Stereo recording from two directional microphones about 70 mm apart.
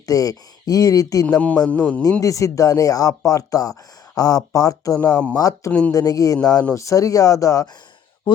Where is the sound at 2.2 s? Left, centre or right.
Left.